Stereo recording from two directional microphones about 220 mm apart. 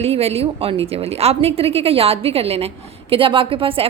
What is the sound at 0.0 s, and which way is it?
A woman's voice, 25° right (ahead or behind).